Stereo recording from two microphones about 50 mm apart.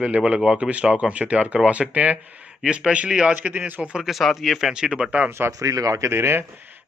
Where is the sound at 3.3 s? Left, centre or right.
Right.